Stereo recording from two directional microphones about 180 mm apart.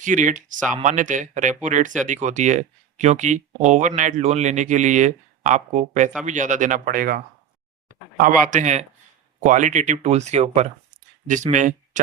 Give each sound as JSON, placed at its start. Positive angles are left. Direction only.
{"t": 0.0, "sound": "speech", "side_deg": -45}
{"t": 8.2, "sound": "speech", "side_deg": -50}